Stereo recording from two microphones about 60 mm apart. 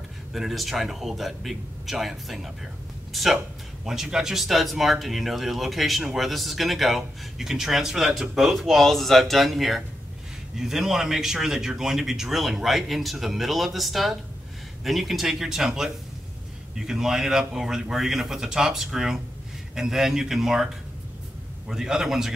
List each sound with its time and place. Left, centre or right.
0.3 s speech: centre
21.6 s speech: centre